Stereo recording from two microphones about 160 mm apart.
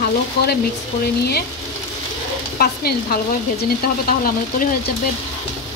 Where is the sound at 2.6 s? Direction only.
75° left (ahead or behind).